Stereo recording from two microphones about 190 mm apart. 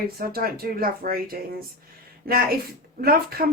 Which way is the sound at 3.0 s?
50° right (ahead or behind).